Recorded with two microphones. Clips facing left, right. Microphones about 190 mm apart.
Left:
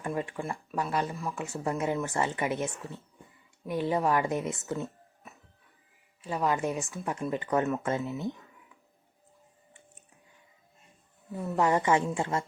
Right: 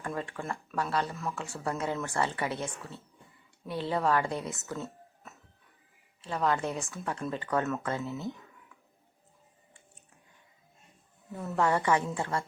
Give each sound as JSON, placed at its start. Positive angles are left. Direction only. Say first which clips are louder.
{"t": 0.0, "sound": "speech", "louder": "left 3 dB", "side_deg": 15}
{"t": 11.3, "sound": "speech", "louder": "left 2 dB", "side_deg": 15}